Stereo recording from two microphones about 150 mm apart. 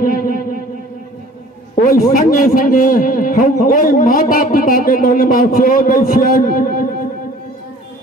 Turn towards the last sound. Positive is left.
turn(degrees=70)  # may be behind; listen again after turning